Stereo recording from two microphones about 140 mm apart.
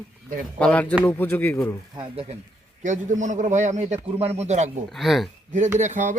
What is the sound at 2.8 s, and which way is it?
A man's voice, 60° right (ahead or behind).